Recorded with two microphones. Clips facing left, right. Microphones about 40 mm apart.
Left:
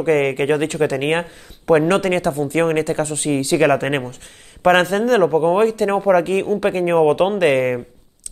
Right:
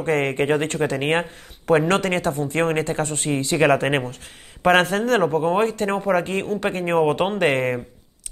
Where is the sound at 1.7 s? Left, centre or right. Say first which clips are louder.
Left 3 dB; centre.